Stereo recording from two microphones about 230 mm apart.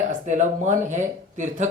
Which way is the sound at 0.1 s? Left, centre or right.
Right.